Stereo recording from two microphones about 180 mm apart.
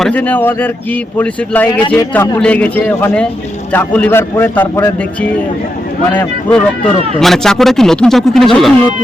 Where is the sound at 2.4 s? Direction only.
5° left (ahead or behind).